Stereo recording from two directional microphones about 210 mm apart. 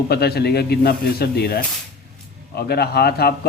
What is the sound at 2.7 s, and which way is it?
Speech, 50° left (ahead or behind).